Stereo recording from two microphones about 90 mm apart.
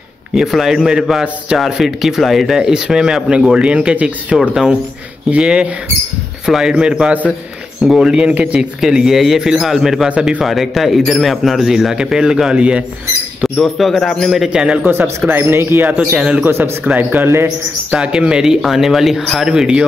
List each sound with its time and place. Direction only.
0.3 s speech: 5° right (ahead or behind)
10.4 s speech: centre (ahead or behind)
13.4 s speech: centre (ahead or behind)
14.9 s speech: 25° right (ahead or behind)
15.9 s speech: 10° right (ahead or behind)
16.4 s speech: 25° right (ahead or behind)
17.9 s speech: 10° right (ahead or behind)